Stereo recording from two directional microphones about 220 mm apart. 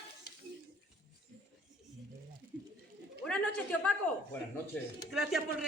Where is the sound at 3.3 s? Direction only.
5° left (ahead or behind).